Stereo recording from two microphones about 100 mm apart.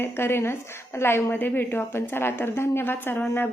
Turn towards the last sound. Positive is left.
turn(degrees=20)  # may be behind; listen again after turning